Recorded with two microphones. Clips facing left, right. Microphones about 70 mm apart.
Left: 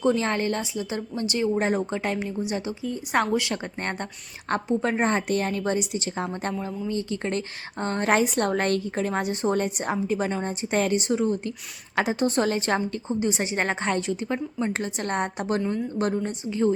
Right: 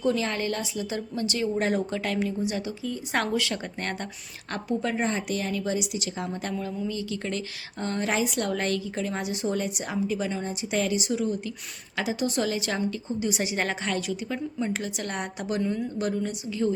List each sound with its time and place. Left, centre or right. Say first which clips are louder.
0.1 s a woman's voice: left 3 dB; left
6.5 s a woman's voice: left 2 dB; left